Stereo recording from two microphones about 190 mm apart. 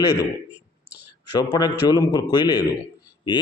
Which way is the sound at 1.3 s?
20° left (ahead or behind).